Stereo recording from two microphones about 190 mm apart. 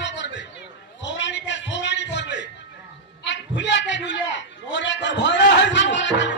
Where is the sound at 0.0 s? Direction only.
65° left (ahead or behind).